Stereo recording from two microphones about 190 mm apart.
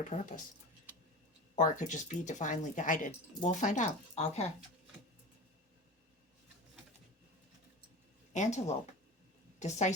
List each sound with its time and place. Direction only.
0.1 s speech: 40° left (ahead or behind)
1.5 s speech: 40° left (ahead or behind)
8.3 s a woman's voice: 40° left (ahead or behind)